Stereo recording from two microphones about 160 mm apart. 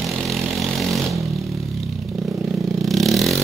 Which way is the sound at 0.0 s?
Centre (ahead or behind).